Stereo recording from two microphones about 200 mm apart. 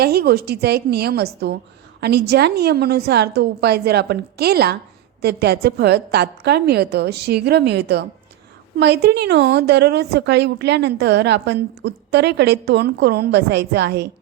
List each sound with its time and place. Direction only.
0.0 s a woman's voice: 50° right (ahead or behind)